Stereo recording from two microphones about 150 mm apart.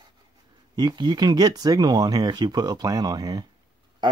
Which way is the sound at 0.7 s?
30° right (ahead or behind).